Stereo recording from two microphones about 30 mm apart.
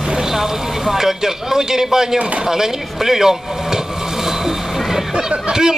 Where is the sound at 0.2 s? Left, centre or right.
Centre.